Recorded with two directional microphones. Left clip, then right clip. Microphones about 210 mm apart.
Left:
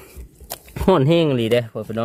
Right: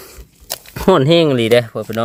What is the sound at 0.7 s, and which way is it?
Speech, 5° right (ahead or behind).